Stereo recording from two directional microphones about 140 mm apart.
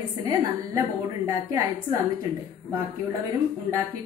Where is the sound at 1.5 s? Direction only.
20° right (ahead or behind).